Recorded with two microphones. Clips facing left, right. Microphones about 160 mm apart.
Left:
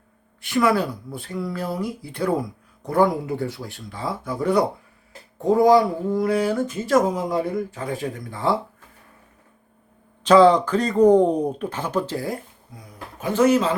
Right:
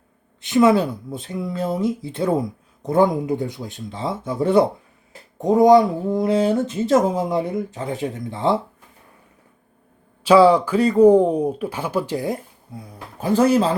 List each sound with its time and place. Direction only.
0.4 s speech: 20° right (ahead or behind)
10.2 s speech: 10° right (ahead or behind); by 13.7 s 35° right (ahead or behind)